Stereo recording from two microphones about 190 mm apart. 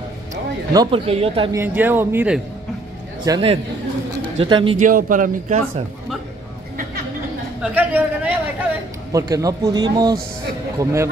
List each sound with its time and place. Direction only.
0.7 s a man's voice: 30° right (ahead or behind)
1.5 s speech: 10° right (ahead or behind)
3.3 s a man's voice: 30° right (ahead or behind)
4.7 s speech: 45° right (ahead or behind)
7.6 s speech: 10° right (ahead or behind)
9.1 s a man's voice: 20° right (ahead or behind)